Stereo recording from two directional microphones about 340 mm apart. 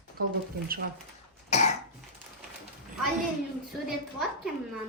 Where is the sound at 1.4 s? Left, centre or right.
Centre.